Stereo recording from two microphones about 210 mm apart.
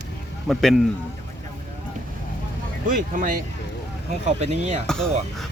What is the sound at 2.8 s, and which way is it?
Speech, 40° right (ahead or behind).